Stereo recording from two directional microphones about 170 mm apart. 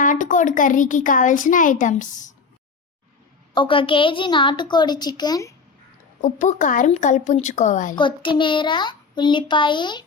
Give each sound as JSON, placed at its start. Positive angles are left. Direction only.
{"t": 0.0, "sound": "speech", "side_deg": 50}
{"t": 3.5, "sound": "a child's voice", "side_deg": 30}
{"t": 6.2, "sound": "speech", "side_deg": 45}
{"t": 7.9, "sound": "a child's voice", "side_deg": 30}